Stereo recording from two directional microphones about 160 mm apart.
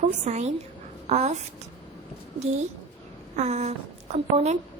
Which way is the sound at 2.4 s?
45° right (ahead or behind).